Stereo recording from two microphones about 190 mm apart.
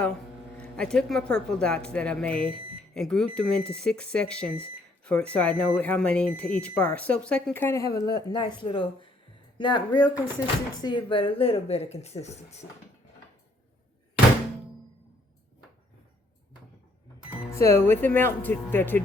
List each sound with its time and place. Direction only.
0.5 s speech: 5° left (ahead or behind); by 12.6 s 35° left (ahead or behind)
17.5 s speech: 15° left (ahead or behind)